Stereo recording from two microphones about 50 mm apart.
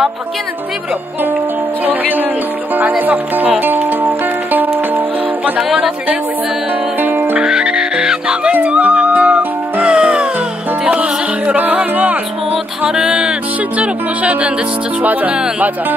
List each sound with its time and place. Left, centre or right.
1.9 s speech: right
3.5 s music: right
7.0 s music: right
7.4 s music: centre
8.6 s music: right
12.9 s music: centre
13.7 s speech: right